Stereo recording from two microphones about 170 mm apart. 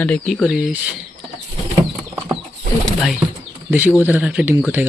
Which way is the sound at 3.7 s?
10° right (ahead or behind).